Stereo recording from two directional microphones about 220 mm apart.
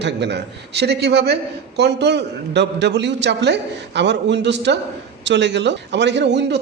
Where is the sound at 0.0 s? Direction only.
50° right (ahead or behind).